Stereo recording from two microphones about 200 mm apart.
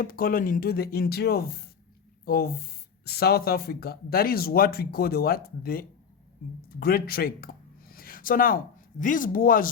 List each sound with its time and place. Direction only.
0.0 s speech: 45° left (ahead or behind)